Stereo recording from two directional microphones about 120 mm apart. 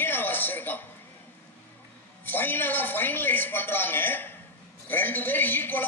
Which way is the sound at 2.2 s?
15° left (ahead or behind).